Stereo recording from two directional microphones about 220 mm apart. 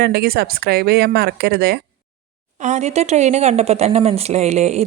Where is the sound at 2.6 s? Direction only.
30° right (ahead or behind).